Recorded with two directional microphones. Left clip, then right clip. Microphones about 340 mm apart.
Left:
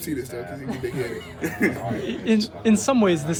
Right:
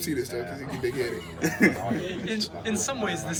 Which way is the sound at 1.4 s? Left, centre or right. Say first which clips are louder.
Right 1 dB; centre.